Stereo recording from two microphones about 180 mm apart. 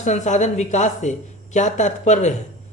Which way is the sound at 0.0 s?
40° left (ahead or behind).